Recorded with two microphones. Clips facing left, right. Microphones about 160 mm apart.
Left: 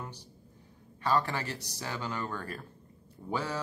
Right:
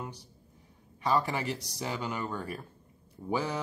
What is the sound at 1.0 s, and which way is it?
Speech, 10° right (ahead or behind).